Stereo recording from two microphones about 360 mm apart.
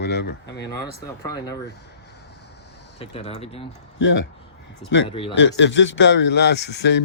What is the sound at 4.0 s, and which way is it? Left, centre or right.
Speech, left.